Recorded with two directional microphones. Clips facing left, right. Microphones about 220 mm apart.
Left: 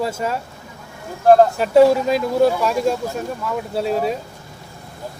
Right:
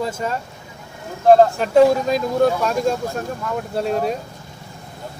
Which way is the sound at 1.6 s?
5° left (ahead or behind).